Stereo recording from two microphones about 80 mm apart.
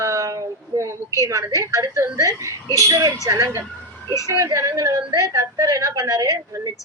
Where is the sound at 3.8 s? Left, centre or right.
Centre.